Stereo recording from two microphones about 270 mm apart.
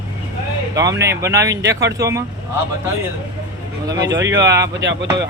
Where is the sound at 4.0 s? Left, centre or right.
Right.